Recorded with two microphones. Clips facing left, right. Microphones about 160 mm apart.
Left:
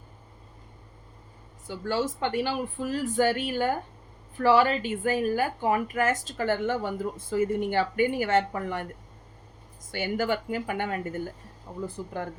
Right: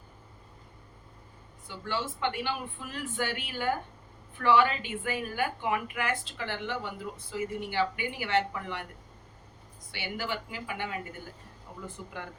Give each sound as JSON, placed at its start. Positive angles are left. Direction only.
{"t": 1.6, "sound": "a woman's voice", "side_deg": 40}
{"t": 9.9, "sound": "a woman's voice", "side_deg": 45}
{"t": 11.9, "sound": "speech", "side_deg": 40}